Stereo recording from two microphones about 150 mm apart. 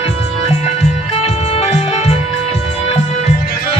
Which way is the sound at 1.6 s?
45° left (ahead or behind).